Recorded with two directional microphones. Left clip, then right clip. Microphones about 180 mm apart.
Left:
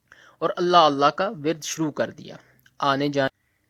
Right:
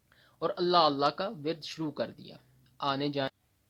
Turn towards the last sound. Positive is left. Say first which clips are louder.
# left 9 dB
turn(degrees=40)  # may be behind; listen again after turning